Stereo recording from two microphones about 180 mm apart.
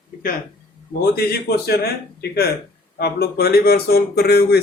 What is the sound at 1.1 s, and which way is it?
Speech, 60° left (ahead or behind).